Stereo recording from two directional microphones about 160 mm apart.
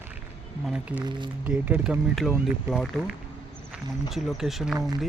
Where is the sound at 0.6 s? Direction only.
5° right (ahead or behind).